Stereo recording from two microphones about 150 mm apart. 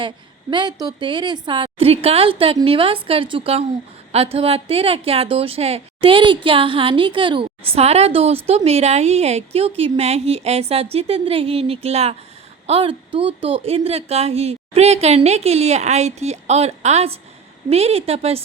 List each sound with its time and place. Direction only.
0.5 s a woman's voice: 25° right (ahead or behind)